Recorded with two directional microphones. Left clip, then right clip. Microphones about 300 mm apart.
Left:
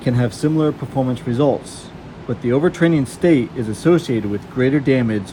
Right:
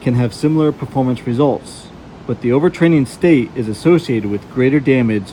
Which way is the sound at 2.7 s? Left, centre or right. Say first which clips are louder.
Right 3 dB; centre.